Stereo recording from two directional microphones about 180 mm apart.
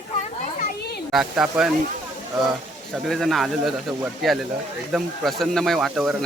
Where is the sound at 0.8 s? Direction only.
65° left (ahead or behind).